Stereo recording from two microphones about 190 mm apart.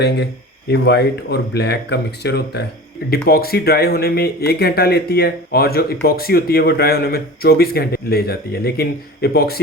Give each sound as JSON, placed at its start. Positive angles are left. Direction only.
{"t": 0.7, "sound": "speech", "side_deg": 60}